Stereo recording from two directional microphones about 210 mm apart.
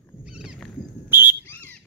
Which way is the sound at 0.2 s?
5° right (ahead or behind).